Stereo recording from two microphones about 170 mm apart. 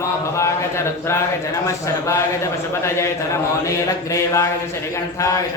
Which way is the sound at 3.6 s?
20° left (ahead or behind).